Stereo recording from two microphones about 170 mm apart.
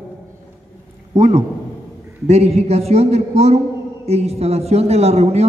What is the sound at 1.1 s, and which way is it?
A man's voice, 40° right (ahead or behind).